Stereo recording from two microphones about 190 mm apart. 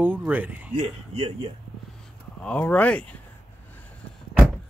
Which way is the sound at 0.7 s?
35° right (ahead or behind).